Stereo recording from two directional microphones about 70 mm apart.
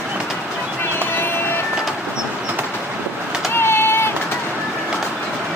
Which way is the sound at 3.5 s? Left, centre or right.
Left.